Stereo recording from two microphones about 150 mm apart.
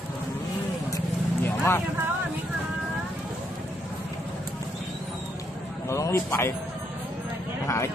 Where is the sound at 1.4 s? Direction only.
15° left (ahead or behind).